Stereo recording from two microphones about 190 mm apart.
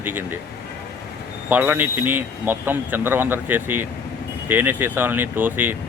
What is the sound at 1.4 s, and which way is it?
Speech, 10° right (ahead or behind).